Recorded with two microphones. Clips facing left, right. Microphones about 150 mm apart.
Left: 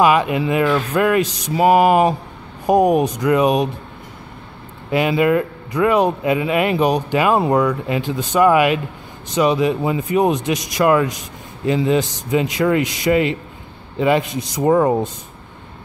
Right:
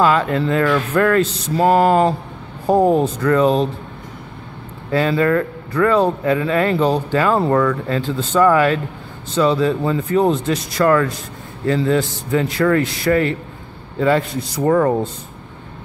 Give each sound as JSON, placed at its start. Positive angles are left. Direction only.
{"t": 0.0, "sound": "speech", "side_deg": 15}
{"t": 4.9, "sound": "speech", "side_deg": 15}